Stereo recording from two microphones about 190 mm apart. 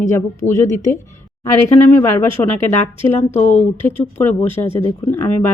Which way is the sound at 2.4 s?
20° left (ahead or behind).